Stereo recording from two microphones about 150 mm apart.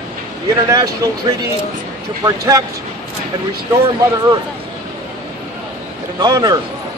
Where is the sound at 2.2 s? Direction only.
25° right (ahead or behind).